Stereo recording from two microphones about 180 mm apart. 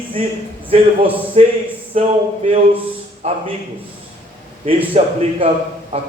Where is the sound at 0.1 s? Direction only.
30° right (ahead or behind).